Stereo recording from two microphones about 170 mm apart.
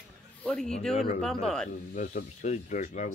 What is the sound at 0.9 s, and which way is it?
Speech, 40° left (ahead or behind).